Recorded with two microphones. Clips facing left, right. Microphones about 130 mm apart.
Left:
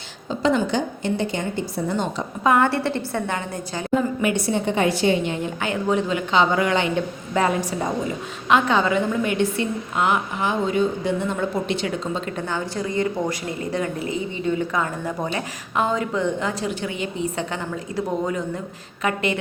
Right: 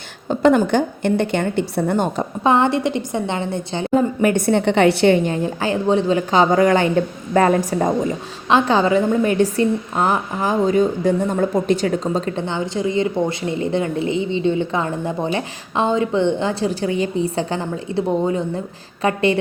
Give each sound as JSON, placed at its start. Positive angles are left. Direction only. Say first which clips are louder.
{"t": 0.3, "sound": "a woman's voice", "louder": "right 6 dB", "side_deg": -55}
{"t": 2.4, "sound": "a woman's voice", "louder": "right 2 dB", "side_deg": -25}
{"t": 4.2, "sound": "a woman's voice", "louder": "right 6 dB", "side_deg": -50}
{"t": 5.2, "sound": "a woman's voice", "louder": "right 5 dB", "side_deg": -35}
{"t": 8.4, "sound": "a woman's voice", "louder": "right 3 dB", "side_deg": -30}
{"t": 12.4, "sound": "a woman's voice", "louder": "right 4 dB", "side_deg": -20}